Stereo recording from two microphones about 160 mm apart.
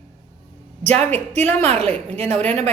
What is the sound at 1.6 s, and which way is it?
Speech, 40° right (ahead or behind).